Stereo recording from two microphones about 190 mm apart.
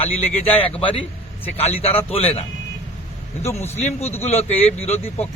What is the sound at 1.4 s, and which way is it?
A man's voice, 30° left (ahead or behind).